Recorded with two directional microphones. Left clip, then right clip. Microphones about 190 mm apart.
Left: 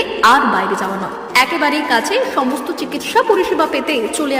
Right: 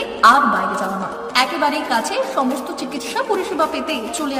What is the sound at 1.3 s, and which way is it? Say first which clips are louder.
A woman's voice: left 4 dB; 10° left (ahead or behind).